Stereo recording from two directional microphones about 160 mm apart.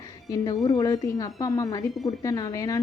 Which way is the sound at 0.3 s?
20° left (ahead or behind).